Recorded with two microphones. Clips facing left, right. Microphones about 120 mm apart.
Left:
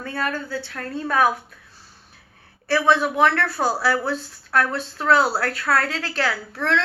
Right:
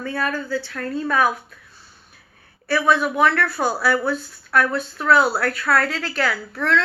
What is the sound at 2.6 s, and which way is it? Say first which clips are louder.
A woman's voice: even; 30° left (ahead or behind).